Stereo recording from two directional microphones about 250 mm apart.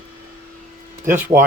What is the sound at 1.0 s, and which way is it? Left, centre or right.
Speech, centre.